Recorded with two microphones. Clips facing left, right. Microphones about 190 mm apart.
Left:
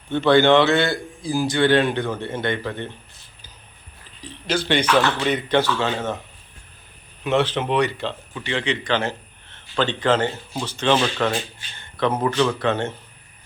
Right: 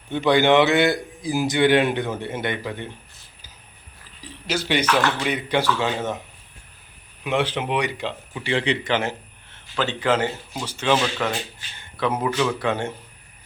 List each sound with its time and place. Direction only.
0.1 s a man's voice: 15° right (ahead or behind)
4.2 s a man's voice: 10° right (ahead or behind)
7.3 s a man's voice: 10° right (ahead or behind)
8.4 s a man's voice: 35° right (ahead or behind)
8.9 s a man's voice: 15° right (ahead or behind)